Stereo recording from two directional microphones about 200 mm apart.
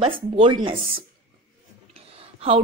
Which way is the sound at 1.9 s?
30° right (ahead or behind).